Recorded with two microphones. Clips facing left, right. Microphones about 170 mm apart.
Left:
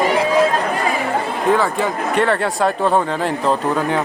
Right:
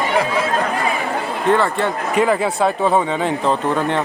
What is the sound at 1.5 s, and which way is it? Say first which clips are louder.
Speech: right 1 dB; 5° left (ahead or behind).